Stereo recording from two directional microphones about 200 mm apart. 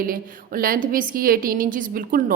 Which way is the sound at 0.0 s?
45° right (ahead or behind).